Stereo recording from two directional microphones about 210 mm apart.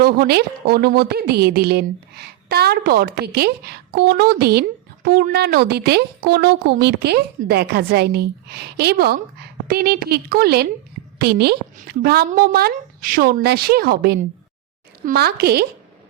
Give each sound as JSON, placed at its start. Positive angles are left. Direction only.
{"t": 0.0, "sound": "a woman's voice", "side_deg": -50}